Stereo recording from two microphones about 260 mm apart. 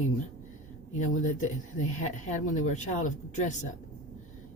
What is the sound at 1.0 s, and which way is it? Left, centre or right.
Speech, left.